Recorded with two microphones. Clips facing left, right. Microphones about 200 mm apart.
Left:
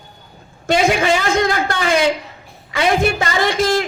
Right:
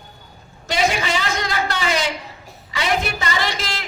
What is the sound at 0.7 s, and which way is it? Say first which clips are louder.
A woman's voice: left 6 dB; 50° left (ahead or behind).